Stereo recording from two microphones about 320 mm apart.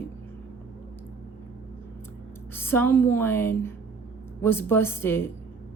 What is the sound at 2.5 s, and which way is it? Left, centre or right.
A woman's voice, centre.